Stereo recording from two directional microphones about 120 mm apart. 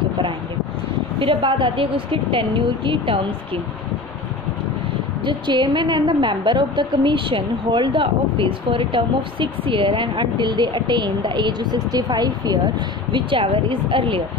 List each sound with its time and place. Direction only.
1.2 s a woman's voice: 45° right (ahead or behind)
5.2 s a woman's voice: 40° right (ahead or behind)
13.1 s a woman's voice: 45° right (ahead or behind)